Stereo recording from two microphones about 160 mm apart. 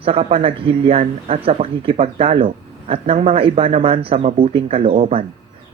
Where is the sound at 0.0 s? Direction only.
40° right (ahead or behind).